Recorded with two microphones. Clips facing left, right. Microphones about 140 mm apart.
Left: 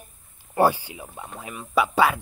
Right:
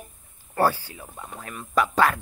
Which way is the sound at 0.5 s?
15° left (ahead or behind).